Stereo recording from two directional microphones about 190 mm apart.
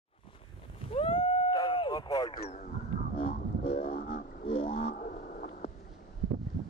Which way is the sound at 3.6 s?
35° left (ahead or behind).